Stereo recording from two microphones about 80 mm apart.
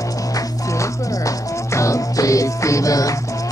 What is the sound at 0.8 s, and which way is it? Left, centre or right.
Music, left.